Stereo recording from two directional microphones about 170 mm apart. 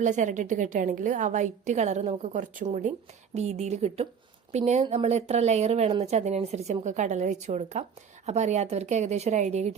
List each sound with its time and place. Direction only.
0.0 s a woman's voice: 45° right (ahead or behind)